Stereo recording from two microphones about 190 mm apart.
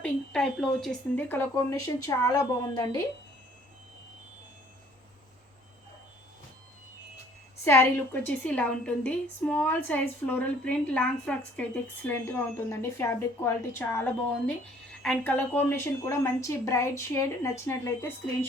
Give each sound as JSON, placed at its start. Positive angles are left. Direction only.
{"t": 0.0, "sound": "a woman's voice", "side_deg": 0}
{"t": 7.6, "sound": "a woman's voice", "side_deg": 10}